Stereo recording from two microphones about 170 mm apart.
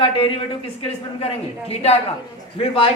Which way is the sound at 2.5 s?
30° left (ahead or behind).